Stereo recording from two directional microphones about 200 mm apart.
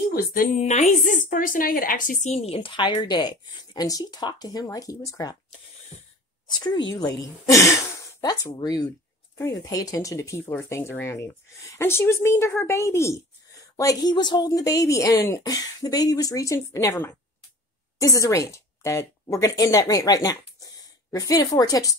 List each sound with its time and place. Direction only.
0.1 s a woman's voice: 45° left (ahead or behind); by 5.4 s 20° left (ahead or behind)
5.9 s a sound: 30° left (ahead or behind)
6.4 s a woman's voice: 20° left (ahead or behind)